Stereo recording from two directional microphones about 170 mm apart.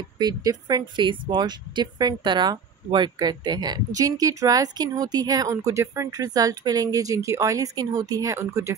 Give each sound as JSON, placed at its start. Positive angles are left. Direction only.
{"t": 0.2, "sound": "speech", "side_deg": -20}